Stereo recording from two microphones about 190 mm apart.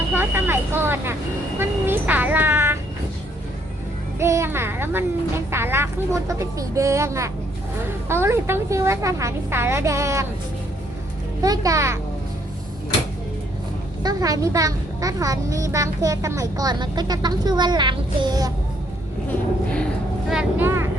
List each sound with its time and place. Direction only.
0.1 s vehicle: 10° right (ahead or behind)
4.2 s a woman's voice: 15° right (ahead or behind)
11.4 s a woman's voice: 15° right (ahead or behind)
14.0 s a child's voice: 20° right (ahead or behind)
19.3 s a sound: 5° left (ahead or behind)
20.3 s a woman's voice: 10° right (ahead or behind)